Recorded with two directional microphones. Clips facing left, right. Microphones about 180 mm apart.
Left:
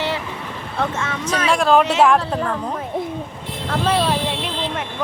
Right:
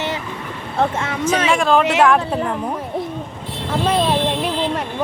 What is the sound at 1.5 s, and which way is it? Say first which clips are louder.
Speech: left 2 dB; centre (ahead or behind).